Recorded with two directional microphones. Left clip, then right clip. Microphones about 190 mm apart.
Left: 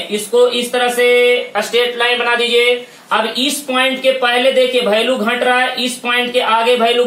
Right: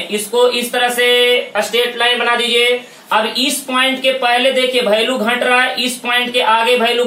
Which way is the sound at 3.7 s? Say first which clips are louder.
Even; 15° left (ahead or behind).